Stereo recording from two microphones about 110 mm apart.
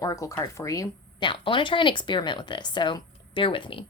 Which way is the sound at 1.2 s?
50° left (ahead or behind).